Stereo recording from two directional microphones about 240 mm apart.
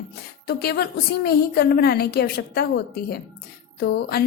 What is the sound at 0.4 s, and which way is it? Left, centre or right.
A woman's voice, left.